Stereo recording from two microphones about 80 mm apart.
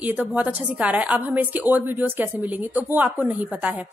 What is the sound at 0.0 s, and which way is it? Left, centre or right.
A woman's voice, right.